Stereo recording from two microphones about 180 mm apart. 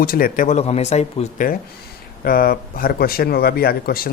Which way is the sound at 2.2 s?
55° left (ahead or behind).